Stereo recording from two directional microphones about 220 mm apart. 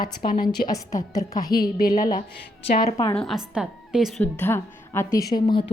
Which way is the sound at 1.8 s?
40° left (ahead or behind).